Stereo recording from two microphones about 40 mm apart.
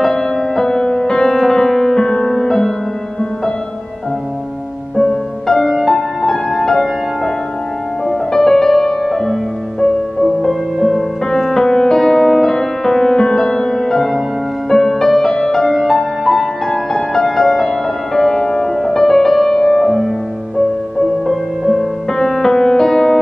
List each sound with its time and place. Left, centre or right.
0.0 s music: centre
4.9 s music: centre
5.7 s music: centre
6.2 s music: centre
8.1 s music: centre